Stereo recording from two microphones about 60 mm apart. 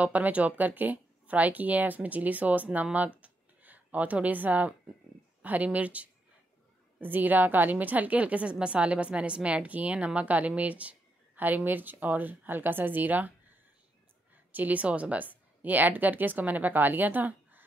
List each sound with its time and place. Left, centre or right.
0.0 s a woman's voice: right
3.2 s a sound: right
5.4 s a woman's voice: right
14.5 s a woman's voice: right